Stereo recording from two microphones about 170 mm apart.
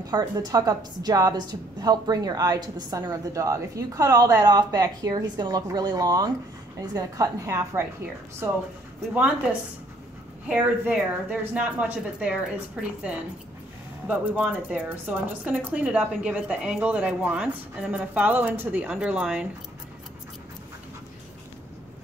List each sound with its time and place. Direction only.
0.0 s a woman's voice: 25° right (ahead or behind)
9.1 s a woman's voice: 10° right (ahead or behind)
14.0 s a woman's voice: 10° right (ahead or behind)